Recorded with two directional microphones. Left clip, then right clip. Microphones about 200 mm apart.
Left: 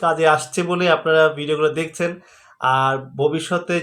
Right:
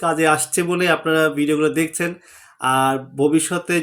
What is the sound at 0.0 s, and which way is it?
Speech, 40° right (ahead or behind).